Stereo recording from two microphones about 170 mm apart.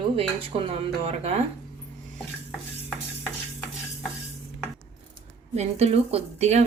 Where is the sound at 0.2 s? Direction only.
35° right (ahead or behind).